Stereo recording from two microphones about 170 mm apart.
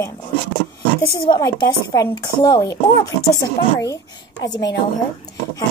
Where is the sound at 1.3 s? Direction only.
25° left (ahead or behind).